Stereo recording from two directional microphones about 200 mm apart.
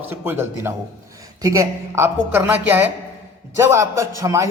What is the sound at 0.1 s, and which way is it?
A woman's voice, 10° right (ahead or behind).